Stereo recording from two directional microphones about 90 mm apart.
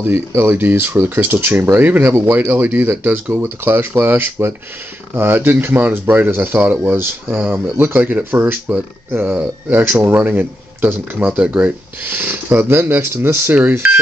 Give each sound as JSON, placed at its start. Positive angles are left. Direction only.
{"t": 0.0, "sound": "speech", "side_deg": -30}